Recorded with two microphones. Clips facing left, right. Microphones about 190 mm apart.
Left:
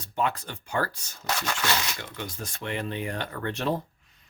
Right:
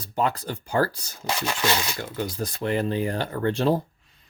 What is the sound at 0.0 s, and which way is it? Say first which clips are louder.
Speech: right 3 dB; 35° right (ahead or behind).